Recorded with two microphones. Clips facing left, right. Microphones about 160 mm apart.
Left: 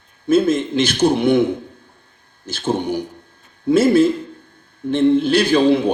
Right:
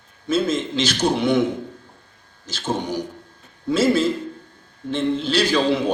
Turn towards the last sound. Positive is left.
turn(degrees=55)  # may be behind; listen again after turning